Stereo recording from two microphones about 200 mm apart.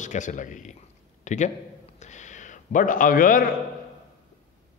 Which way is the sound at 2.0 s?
35° left (ahead or behind).